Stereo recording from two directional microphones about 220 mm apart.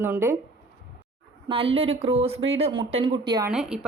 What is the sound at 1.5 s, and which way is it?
Speech, 25° right (ahead or behind).